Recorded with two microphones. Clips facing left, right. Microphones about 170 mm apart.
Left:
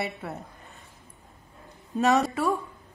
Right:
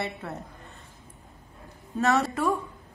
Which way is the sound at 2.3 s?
Centre (ahead or behind).